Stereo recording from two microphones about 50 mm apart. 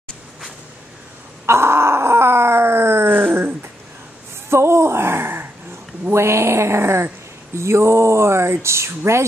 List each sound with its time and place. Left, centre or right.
1.4 s groan: right
4.5 s a sound: right
6.0 s speech: right